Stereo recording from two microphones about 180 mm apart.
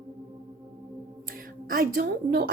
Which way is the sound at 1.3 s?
50° right (ahead or behind).